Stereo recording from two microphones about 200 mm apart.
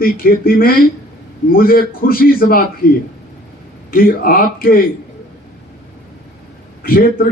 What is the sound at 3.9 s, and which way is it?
Speech, 45° left (ahead or behind).